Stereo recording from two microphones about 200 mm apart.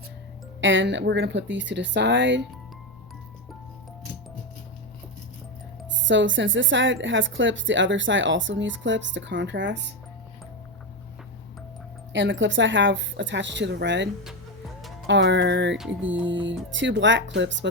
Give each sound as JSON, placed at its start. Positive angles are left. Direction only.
{"t": 0.6, "sound": "a woman's voice", "side_deg": -70}
{"t": 6.1, "sound": "a woman's voice", "side_deg": -65}
{"t": 12.1, "sound": "a woman's voice", "side_deg": -65}
{"t": 15.8, "sound": "music", "side_deg": -5}
{"t": 16.2, "sound": "a woman's voice", "side_deg": -70}